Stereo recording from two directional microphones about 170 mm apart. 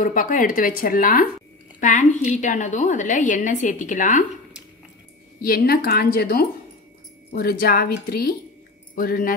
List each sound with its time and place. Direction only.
0.0 s a woman's voice: 55° left (ahead or behind)
5.4 s speech: 60° left (ahead or behind)